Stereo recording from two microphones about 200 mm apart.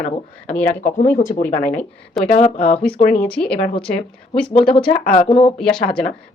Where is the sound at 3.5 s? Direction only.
25° left (ahead or behind).